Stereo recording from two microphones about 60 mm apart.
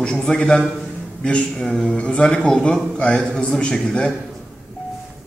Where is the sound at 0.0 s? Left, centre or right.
Centre.